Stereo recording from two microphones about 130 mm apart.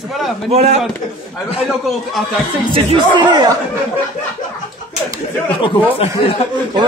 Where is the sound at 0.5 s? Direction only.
55° right (ahead or behind).